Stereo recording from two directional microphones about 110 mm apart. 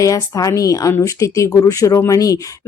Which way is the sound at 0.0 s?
30° left (ahead or behind).